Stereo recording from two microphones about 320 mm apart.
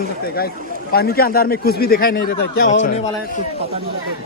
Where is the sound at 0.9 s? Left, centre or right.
Left.